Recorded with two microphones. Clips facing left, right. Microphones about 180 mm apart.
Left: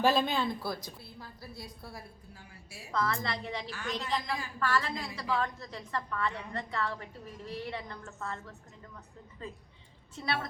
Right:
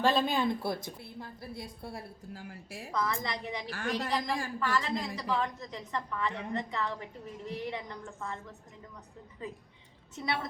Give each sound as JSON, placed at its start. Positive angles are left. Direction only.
{"t": 0.0, "sound": "speech", "side_deg": 5}
{"t": 0.3, "sound": "a woman's voice", "side_deg": -20}
{"t": 2.9, "sound": "a woman's voice", "side_deg": -15}
{"t": 3.7, "sound": "a woman's voice", "side_deg": -50}
{"t": 4.6, "sound": "a woman's voice", "side_deg": -20}
{"t": 9.4, "sound": "a woman's voice", "side_deg": -15}